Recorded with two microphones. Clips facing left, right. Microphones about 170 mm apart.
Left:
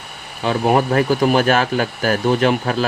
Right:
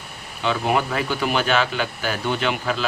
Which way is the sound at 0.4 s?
40° left (ahead or behind).